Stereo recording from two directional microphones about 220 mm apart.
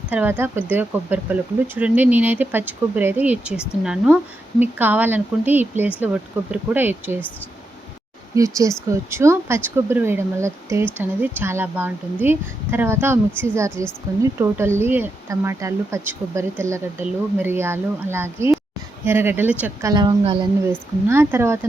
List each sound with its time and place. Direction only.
0.1 s speech: 10° right (ahead or behind)
8.4 s a woman's voice: 15° right (ahead or behind)
21.1 s speech: 10° right (ahead or behind)